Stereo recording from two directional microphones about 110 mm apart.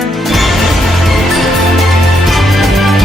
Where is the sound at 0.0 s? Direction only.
Centre (ahead or behind).